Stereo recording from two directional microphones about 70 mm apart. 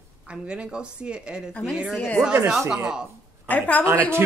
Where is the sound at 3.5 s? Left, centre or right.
Left.